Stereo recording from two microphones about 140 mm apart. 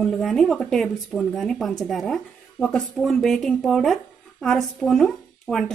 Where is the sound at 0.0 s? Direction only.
Centre (ahead or behind).